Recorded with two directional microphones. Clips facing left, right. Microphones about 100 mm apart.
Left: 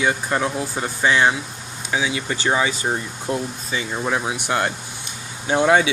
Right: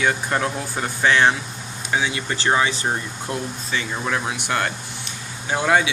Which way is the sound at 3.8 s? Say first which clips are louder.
Left 2 dB; 15° left (ahead or behind).